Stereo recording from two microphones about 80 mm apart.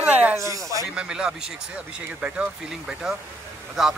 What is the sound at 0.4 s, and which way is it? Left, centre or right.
Speech, right.